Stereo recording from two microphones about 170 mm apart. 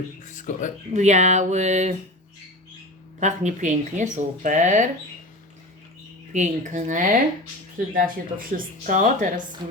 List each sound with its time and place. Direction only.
0.2 s speech: 50° left (ahead or behind)
0.9 s speech: 45° right (ahead or behind)
3.2 s speech: 45° right (ahead or behind)
6.3 s speech: 45° right (ahead or behind)